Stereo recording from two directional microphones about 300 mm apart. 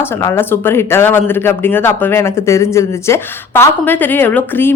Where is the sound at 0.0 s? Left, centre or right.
Centre.